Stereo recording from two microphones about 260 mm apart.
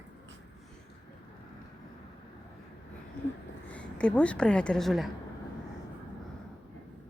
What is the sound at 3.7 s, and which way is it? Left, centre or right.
A woman's voice, centre.